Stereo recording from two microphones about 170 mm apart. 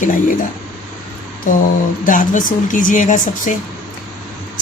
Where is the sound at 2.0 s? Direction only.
50° left (ahead or behind).